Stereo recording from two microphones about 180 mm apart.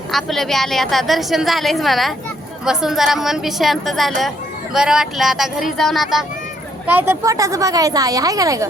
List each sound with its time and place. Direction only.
0.1 s a woman's voice: centre (ahead or behind)
6.8 s speech: 10° right (ahead or behind)